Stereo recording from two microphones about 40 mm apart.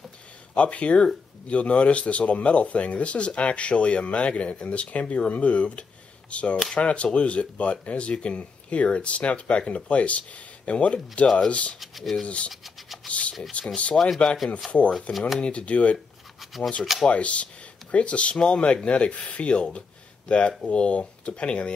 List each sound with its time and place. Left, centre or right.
0.6 s speech: left
13.9 s speech: centre
14.9 s speech: left
15.1 s speech: centre
15.4 s speech: left
16.3 s toothbrush: centre
17.1 s speech: left